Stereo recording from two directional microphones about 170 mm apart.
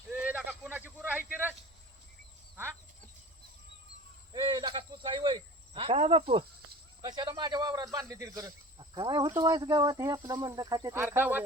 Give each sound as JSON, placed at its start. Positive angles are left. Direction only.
{"t": 0.1, "sound": "a sound", "side_deg": -10}
{"t": 1.3, "sound": "cricket", "side_deg": -10}
{"t": 4.3, "sound": "cricket", "side_deg": -25}
{"t": 7.0, "sound": "speech", "side_deg": -25}